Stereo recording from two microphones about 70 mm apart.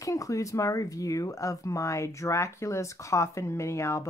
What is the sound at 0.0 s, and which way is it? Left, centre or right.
Speech, left.